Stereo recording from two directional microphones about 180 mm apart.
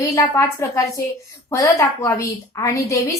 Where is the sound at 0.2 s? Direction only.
20° left (ahead or behind).